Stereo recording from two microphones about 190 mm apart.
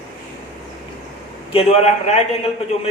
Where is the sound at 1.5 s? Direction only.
35° left (ahead or behind).